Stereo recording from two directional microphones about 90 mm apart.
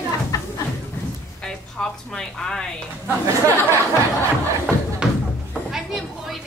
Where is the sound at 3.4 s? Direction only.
25° left (ahead or behind).